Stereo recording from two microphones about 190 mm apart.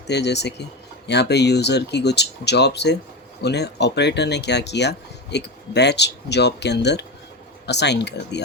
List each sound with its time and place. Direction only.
0.1 s speech: 60° left (ahead or behind)